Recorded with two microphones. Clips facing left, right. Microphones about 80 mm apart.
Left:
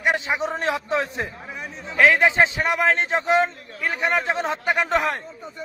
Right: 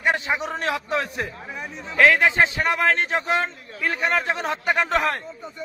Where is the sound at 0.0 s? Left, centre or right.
Centre.